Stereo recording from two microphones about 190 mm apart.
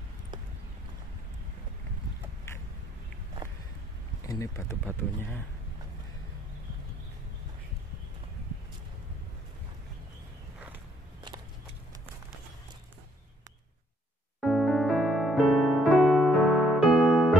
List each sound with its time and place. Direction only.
4.3 s speech: 15° left (ahead or behind)
14.4 s electric piano: centre (ahead or behind)